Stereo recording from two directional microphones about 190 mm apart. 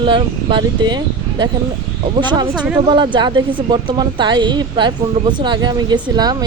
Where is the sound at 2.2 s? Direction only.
25° right (ahead or behind).